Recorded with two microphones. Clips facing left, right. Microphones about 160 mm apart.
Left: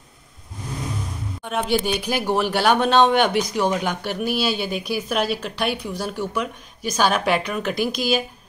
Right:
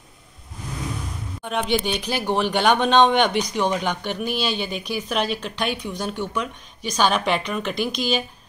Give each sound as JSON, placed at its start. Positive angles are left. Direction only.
{"t": 1.4, "sound": "speech", "side_deg": 0}